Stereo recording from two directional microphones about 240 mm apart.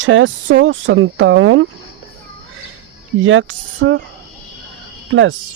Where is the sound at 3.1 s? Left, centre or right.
Right.